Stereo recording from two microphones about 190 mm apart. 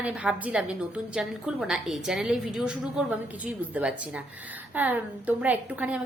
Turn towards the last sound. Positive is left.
turn(degrees=-10)  # may be behind; listen again after turning